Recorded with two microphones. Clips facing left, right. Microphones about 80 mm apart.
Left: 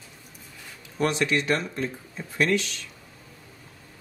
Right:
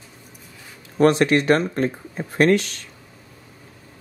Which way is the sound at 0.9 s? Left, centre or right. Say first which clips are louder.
Right 8 dB; right.